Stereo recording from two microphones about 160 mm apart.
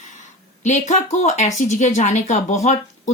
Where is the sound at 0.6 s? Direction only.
45° left (ahead or behind).